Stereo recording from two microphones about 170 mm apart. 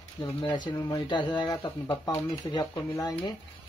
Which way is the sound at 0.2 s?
25° left (ahead or behind).